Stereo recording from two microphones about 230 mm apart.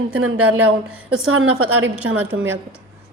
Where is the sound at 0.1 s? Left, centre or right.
Right.